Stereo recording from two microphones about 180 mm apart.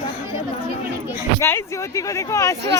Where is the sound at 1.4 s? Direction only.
15° left (ahead or behind).